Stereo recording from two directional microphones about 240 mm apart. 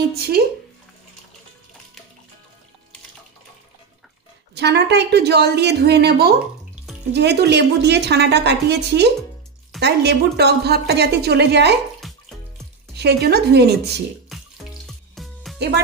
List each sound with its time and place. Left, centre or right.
4.6 s a woman's voice: right
12.0 s music: centre
12.9 s a woman's voice: right
14.3 s water tap: centre